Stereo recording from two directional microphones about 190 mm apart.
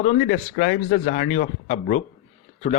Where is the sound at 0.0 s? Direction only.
45° left (ahead or behind).